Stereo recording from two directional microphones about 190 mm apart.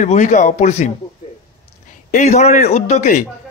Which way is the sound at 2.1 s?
40° left (ahead or behind).